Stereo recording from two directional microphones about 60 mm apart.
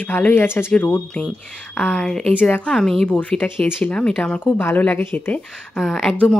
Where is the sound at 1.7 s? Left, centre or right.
Centre.